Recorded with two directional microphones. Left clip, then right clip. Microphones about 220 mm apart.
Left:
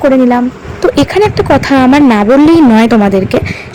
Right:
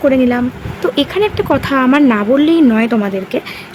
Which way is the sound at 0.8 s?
20° left (ahead or behind).